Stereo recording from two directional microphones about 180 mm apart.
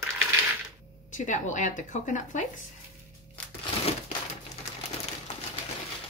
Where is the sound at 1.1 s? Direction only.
45° left (ahead or behind).